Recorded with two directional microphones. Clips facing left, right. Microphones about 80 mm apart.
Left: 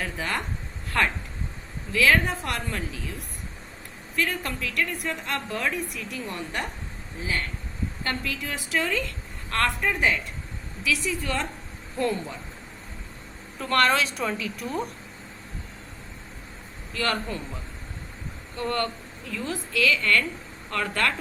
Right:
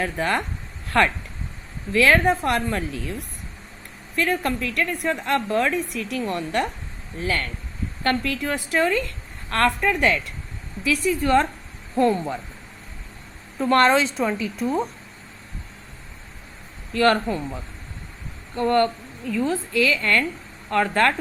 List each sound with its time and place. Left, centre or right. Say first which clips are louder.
0.0 s a woman's voice: right 6 dB; right
7.2 s speech: right 5 dB; right
8.0 s a woman's voice: right 9 dB; right
9.9 s a woman's voice: right 4 dB; right
10.8 s a woman's voice: right 7 dB; right
13.6 s a woman's voice: right 5 dB; right
16.9 s a woman's voice: right 9 dB; right
18.5 s a woman's voice: right 8 dB; right